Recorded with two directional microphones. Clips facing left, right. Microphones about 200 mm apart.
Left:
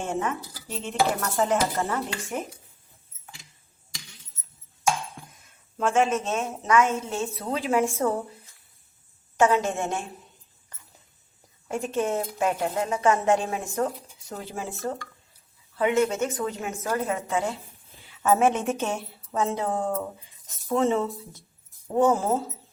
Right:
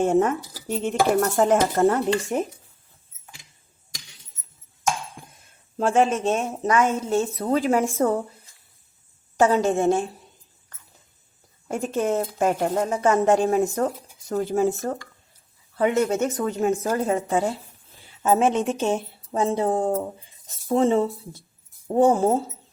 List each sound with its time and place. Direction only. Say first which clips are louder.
0.0 s speech: right 9 dB; 50° right (ahead or behind)
2.3 s speech: right 7 dB; 35° right (ahead or behind)
5.7 s speech: right 3 dB; 35° right (ahead or behind)
9.4 s speech: right 4 dB; 35° right (ahead or behind)
11.7 s a woman's voice: right 3 dB; 40° right (ahead or behind); by 19.0 s 20° right (ahead or behind)
19.3 s speech: right 4 dB; 30° right (ahead or behind)